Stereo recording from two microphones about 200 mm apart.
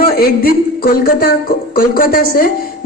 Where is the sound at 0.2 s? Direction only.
50° left (ahead or behind).